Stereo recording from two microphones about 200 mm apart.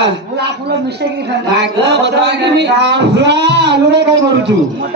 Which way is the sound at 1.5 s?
60° right (ahead or behind).